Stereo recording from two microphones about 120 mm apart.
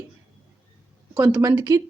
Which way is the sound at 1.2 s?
30° right (ahead or behind).